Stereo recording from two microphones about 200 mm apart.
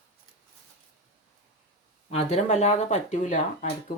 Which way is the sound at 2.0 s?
35° left (ahead or behind).